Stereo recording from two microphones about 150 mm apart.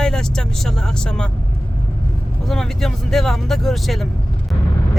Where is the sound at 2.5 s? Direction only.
Centre (ahead or behind).